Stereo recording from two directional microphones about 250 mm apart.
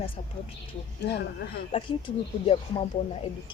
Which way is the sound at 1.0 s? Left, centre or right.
Left.